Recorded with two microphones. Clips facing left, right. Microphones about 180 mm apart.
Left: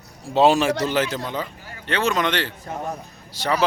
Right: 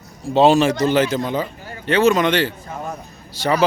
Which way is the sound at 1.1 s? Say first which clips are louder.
Right 6 dB; 5° right (ahead or behind).